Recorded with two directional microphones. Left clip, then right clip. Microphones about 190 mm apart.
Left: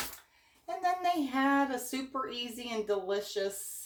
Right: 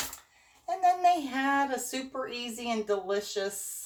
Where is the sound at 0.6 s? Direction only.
10° left (ahead or behind).